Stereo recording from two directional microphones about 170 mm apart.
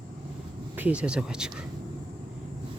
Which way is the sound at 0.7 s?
10° right (ahead or behind).